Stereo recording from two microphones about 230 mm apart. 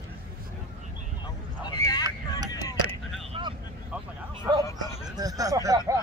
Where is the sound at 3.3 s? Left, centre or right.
Right.